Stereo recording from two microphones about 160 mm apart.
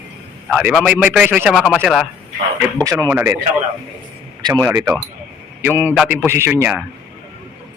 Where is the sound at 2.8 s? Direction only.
15° right (ahead or behind).